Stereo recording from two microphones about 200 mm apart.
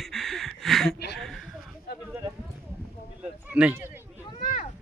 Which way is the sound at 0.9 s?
55° left (ahead or behind).